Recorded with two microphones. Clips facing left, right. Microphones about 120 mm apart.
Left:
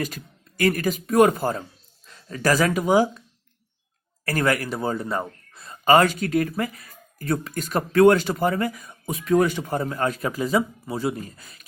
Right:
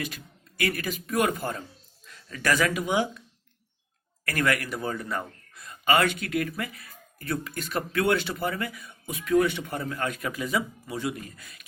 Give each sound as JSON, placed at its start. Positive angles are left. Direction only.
{"t": 0.6, "sound": "speech", "side_deg": 40}
{"t": 4.3, "sound": "speech", "side_deg": 35}